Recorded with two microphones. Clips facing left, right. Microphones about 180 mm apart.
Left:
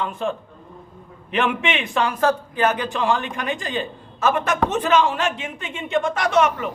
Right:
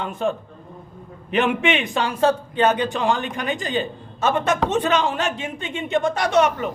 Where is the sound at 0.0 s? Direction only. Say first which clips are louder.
Right 1 dB; 45° right (ahead or behind).